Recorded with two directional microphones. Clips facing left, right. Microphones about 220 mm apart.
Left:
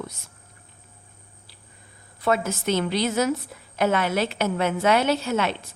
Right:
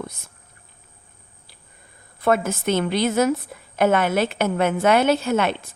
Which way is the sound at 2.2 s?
55° right (ahead or behind).